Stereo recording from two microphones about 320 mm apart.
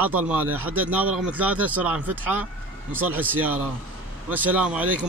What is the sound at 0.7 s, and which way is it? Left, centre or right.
Speech, centre.